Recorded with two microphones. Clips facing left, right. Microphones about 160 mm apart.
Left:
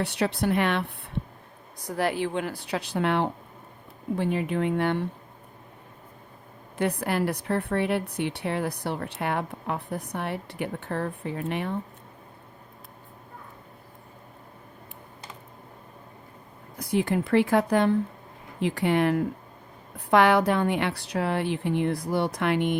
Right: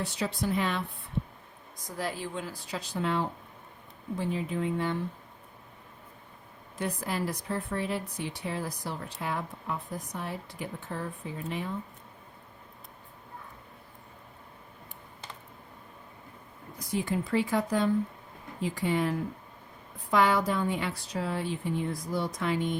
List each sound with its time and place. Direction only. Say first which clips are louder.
0.0 s a woman's voice: left 6 dB; 65° left (ahead or behind)
6.7 s a woman's voice: left 6 dB; 65° left (ahead or behind)
16.7 s a woman's voice: left 6 dB; 65° left (ahead or behind)